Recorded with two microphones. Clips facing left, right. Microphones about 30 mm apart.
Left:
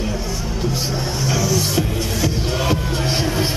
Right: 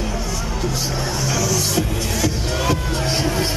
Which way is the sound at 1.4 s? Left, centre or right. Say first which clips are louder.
Left 1 dB; centre.